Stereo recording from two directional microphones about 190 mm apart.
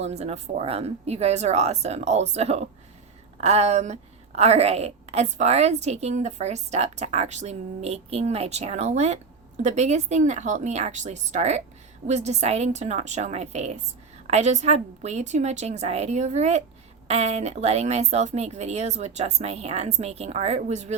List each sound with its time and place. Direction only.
0.0 s a woman's voice: 35° right (ahead or behind)